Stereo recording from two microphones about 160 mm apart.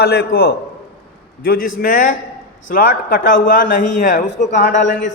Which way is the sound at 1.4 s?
65° left (ahead or behind).